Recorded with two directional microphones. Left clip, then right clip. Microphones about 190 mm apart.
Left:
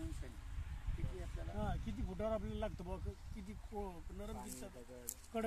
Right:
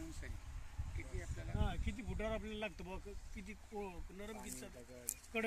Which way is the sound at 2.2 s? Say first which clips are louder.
Left 2 dB; 20° left (ahead or behind).